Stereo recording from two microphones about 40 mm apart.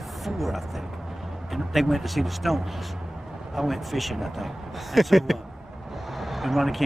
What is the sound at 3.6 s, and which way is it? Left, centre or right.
Speech, centre.